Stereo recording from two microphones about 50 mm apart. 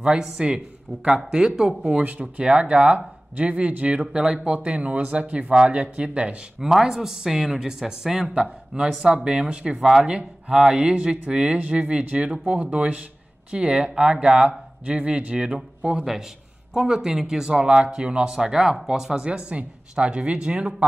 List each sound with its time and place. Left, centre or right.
0.4 s speech: centre
6.6 s speech: centre